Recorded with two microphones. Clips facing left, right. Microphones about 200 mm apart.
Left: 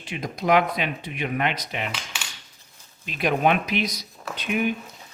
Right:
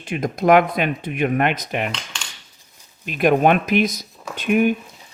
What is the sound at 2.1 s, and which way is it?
Cutlery, 5° left (ahead or behind).